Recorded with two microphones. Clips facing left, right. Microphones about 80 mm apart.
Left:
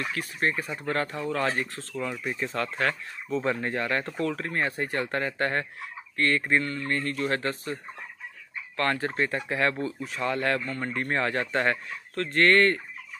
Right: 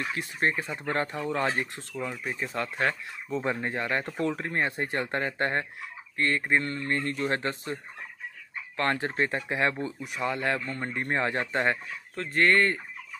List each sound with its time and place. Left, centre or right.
0.1 s speech: right
6.6 s speech: right
12.3 s speech: centre